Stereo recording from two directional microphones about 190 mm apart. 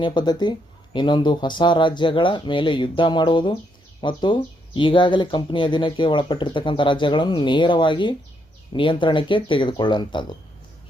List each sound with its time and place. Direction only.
0.0 s speech: 25° left (ahead or behind)